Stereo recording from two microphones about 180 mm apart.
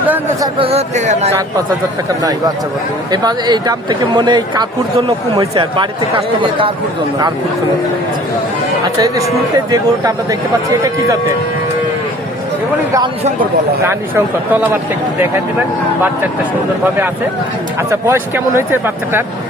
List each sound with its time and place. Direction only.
0.6 s speech: 35° right (ahead or behind)
3.1 s speech: 25° right (ahead or behind)
9.0 s speech: 20° right (ahead or behind)
13.8 s speech: 15° right (ahead or behind)
17.9 s speech: 15° right (ahead or behind)